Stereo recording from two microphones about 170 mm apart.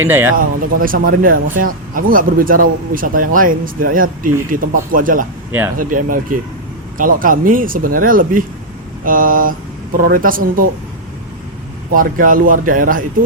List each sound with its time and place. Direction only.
0.0 s speech: 10° right (ahead or behind)
0.3 s speech: 55° right (ahead or behind)
5.5 s speech: 10° right (ahead or behind)
5.7 s a man's voice: 55° right (ahead or behind)
11.9 s a man's voice: 55° right (ahead or behind)